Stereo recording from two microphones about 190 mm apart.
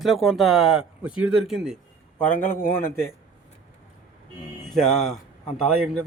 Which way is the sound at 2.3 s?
50° left (ahead or behind).